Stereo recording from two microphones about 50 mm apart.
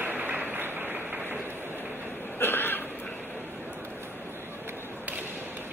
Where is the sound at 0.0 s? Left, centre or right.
Right.